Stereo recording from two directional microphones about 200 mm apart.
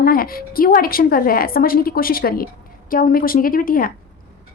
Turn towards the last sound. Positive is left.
turn(degrees=45)  # may be behind; listen again after turning